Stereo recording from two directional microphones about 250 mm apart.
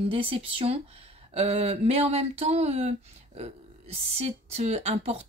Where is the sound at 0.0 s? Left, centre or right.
Right.